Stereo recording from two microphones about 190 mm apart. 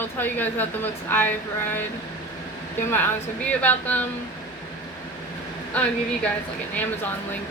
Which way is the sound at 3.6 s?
10° left (ahead or behind).